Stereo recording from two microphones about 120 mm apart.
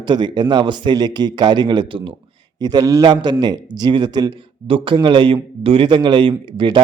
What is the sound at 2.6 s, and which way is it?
A man's voice, 35° right (ahead or behind).